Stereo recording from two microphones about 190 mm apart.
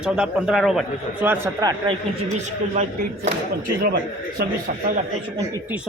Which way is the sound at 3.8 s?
55° right (ahead or behind).